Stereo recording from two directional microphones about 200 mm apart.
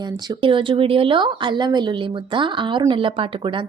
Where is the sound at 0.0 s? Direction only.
25° right (ahead or behind).